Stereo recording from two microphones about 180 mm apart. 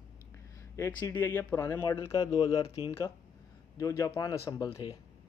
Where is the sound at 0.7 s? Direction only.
15° left (ahead or behind).